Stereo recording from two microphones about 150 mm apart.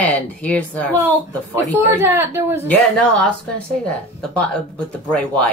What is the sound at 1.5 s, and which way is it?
A woman's voice, 15° right (ahead or behind).